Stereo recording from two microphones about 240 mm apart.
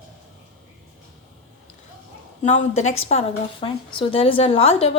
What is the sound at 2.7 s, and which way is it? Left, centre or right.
A woman's voice, left.